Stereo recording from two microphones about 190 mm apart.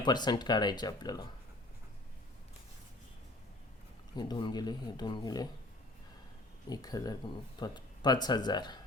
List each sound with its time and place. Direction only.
0.0 s speech: 20° left (ahead or behind)
4.1 s speech: 20° left (ahead or behind)
6.7 s speech: 20° left (ahead or behind)